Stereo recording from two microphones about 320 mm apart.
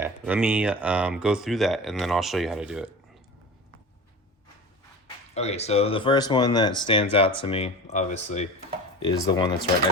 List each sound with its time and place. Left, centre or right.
0.0 s speech: centre
5.3 s speech: centre